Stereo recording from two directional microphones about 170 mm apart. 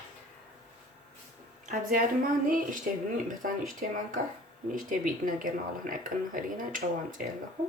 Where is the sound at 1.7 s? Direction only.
55° right (ahead or behind).